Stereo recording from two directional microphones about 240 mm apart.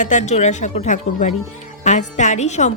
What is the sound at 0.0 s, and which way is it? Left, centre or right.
A woman's voice, left.